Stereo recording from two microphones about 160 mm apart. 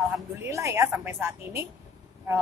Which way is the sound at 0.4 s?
20° right (ahead or behind).